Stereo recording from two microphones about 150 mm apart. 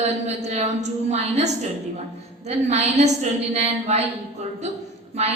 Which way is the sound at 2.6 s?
50° right (ahead or behind).